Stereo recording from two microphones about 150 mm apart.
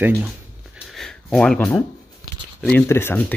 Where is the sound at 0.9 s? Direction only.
Centre (ahead or behind).